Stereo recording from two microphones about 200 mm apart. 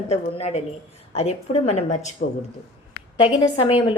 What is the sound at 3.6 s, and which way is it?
Speech, 25° left (ahead or behind).